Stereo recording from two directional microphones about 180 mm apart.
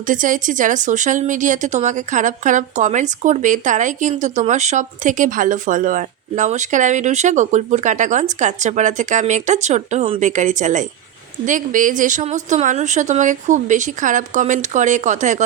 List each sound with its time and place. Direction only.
0.1 s speech: 45° right (ahead or behind)